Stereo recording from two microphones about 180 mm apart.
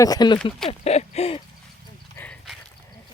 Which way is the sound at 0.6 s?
35° left (ahead or behind).